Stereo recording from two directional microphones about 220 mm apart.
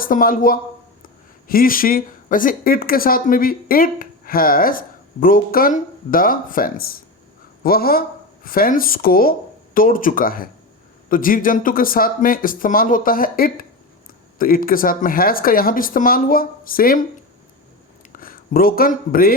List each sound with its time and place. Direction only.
0.0 s a man's voice: 40° left (ahead or behind)
18.2 s speech: 40° left (ahead or behind)